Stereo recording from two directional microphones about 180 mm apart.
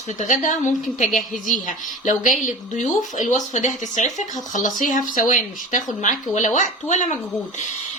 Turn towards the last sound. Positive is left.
turn(degrees=40)  # may be behind; listen again after turning